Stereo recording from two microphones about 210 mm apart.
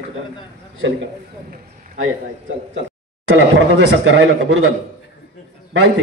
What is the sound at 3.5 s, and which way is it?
Speech, 65° right (ahead or behind).